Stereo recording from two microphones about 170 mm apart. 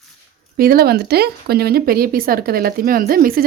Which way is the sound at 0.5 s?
60° right (ahead or behind).